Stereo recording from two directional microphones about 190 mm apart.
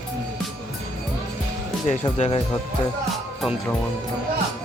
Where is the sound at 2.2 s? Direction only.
30° left (ahead or behind).